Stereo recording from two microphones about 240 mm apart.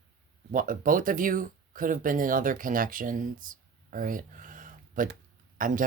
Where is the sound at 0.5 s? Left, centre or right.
Right.